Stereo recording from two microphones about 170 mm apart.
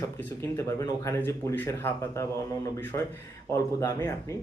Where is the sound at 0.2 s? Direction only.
15° left (ahead or behind).